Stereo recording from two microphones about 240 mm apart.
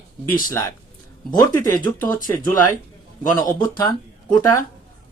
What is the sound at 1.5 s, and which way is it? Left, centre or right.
Speech, centre.